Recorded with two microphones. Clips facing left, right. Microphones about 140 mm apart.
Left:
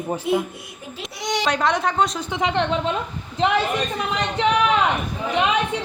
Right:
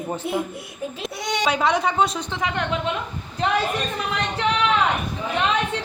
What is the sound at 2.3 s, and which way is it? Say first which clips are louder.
Speech: left 9 dB; 25° left (ahead or behind).